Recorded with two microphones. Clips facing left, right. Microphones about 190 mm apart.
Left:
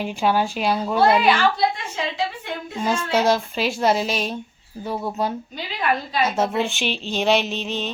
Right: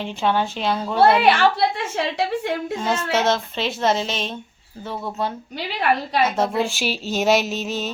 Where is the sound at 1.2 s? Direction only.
70° right (ahead or behind).